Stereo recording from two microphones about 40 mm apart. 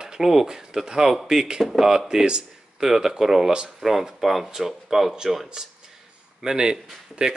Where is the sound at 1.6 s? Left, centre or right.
Centre.